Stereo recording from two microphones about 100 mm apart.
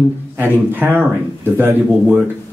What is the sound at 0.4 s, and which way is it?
Speech, 20° right (ahead or behind).